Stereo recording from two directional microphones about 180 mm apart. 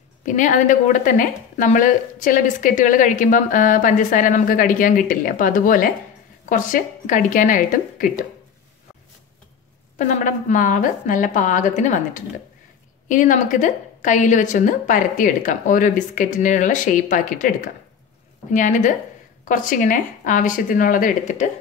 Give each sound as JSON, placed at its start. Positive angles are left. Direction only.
{"t": 0.2, "sound": "speech", "side_deg": 45}
{"t": 9.9, "sound": "speech", "side_deg": 45}